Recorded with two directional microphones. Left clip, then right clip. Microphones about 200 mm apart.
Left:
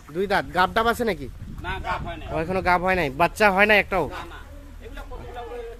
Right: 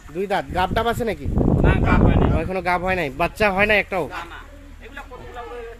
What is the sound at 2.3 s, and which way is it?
Speech, centre (ahead or behind).